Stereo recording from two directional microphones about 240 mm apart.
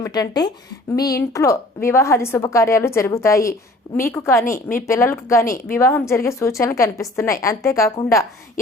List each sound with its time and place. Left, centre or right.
0.0 s a woman's voice: centre